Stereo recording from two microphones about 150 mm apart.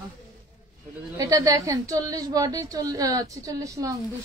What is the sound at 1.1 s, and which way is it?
A woman's voice, 20° right (ahead or behind).